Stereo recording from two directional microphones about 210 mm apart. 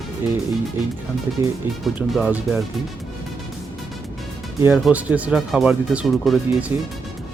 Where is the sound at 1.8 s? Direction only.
5° right (ahead or behind).